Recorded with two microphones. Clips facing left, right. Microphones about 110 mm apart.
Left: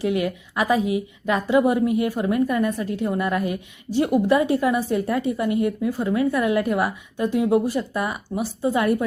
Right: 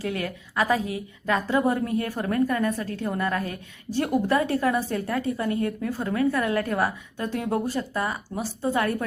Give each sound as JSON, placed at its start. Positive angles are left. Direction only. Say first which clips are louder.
{"t": 0.0, "sound": "a woman's voice", "louder": "left 7 dB", "side_deg": 20}